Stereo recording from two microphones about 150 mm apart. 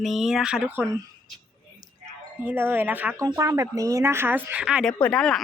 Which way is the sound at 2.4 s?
15° right (ahead or behind).